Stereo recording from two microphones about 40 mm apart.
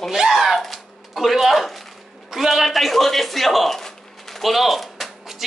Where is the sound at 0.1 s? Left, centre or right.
Centre.